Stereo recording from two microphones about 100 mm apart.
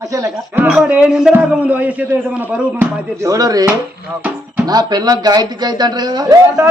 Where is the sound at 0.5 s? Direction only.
15° right (ahead or behind).